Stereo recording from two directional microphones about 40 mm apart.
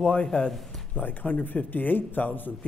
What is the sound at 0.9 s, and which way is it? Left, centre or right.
A man's voice, left.